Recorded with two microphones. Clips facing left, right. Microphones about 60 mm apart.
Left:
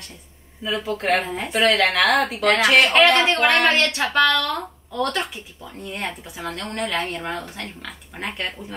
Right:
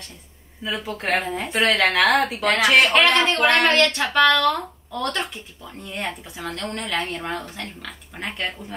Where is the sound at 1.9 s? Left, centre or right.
Right.